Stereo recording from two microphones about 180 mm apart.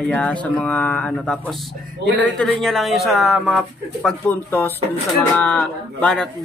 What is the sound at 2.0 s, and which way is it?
Speech, 80° right.